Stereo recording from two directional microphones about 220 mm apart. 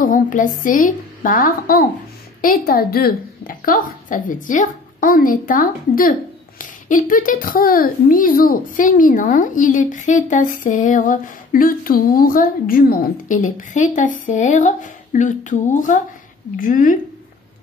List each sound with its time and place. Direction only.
0.0 s speech: 35° left (ahead or behind)